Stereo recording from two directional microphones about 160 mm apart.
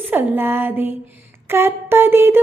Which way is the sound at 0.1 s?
10° right (ahead or behind).